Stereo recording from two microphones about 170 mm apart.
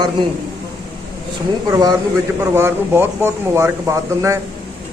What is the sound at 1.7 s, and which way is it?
A man's voice, 25° right (ahead or behind).